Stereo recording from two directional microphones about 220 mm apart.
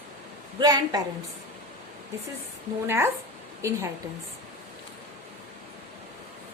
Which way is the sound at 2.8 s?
10° right (ahead or behind).